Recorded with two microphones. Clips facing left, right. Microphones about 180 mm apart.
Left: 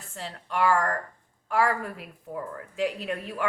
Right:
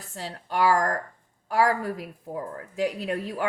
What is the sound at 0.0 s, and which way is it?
A woman's voice, 40° right (ahead or behind).